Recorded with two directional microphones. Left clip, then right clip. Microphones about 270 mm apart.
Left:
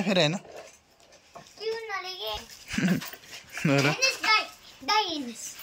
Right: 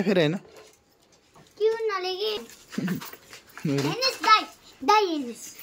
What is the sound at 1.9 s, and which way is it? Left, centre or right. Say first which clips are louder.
Child singing: right 5 dB; right.